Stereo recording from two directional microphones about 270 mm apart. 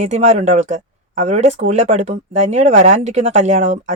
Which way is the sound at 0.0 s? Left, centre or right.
Right.